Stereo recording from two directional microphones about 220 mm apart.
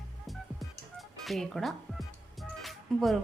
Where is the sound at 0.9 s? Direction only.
Centre (ahead or behind).